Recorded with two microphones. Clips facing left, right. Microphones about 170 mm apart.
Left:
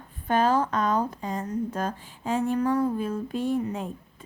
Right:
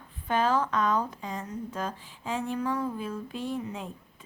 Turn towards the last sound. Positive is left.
turn(degrees=45)  # may be behind; listen again after turning